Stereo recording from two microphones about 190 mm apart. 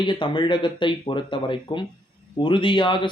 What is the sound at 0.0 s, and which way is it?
Speech, 25° left (ahead or behind).